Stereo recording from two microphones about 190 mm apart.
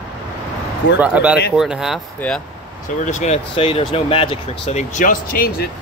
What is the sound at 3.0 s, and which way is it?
Speech, 40° left (ahead or behind).